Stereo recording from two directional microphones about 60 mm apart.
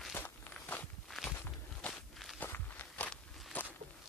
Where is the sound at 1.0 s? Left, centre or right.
Centre.